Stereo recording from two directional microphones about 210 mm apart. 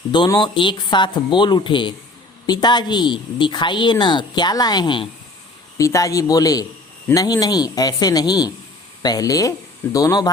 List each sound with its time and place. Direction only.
0.1 s a woman's voice: 20° left (ahead or behind)